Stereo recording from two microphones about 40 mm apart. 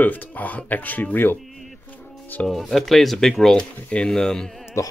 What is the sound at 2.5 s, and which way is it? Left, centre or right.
Speech, centre.